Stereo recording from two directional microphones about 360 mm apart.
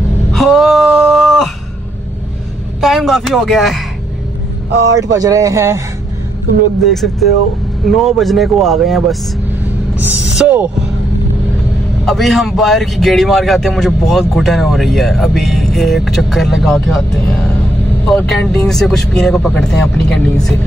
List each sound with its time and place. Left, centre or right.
0.3 s a sound: centre
2.8 s a man's voice: centre
5.1 s speech: centre
6.8 s a man's voice: centre
10.0 s speech: centre
12.1 s a man's voice: centre
18.0 s a man's voice: centre